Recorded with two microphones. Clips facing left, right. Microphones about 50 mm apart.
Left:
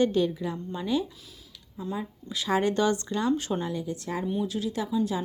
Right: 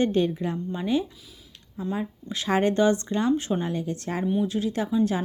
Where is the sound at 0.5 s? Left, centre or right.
Right.